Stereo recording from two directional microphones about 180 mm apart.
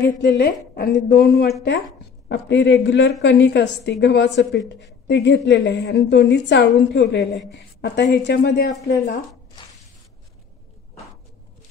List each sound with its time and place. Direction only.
0.0 s a woman's voice: 65° left (ahead or behind)